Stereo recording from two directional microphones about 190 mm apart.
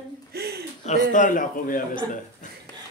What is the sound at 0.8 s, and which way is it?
A man's voice, 40° left (ahead or behind).